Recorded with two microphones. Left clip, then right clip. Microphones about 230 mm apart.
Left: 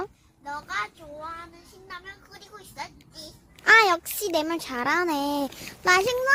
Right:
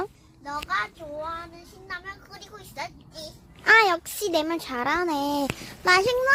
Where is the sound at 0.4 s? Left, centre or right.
Centre.